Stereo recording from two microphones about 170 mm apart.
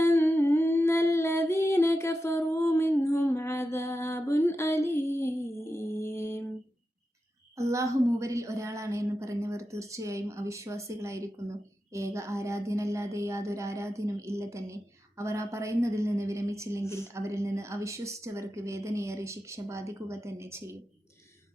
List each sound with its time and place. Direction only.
0.0 s humming: 15° left (ahead or behind)
7.6 s a woman's voice: 15° right (ahead or behind)